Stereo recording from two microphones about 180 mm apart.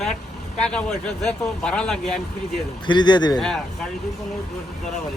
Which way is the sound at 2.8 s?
25° left (ahead or behind).